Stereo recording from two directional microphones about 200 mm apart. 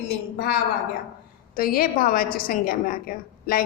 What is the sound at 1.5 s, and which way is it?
A woman's voice, 45° left (ahead or behind).